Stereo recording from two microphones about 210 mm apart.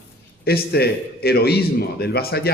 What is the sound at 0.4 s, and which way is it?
A man's voice, 50° left (ahead or behind).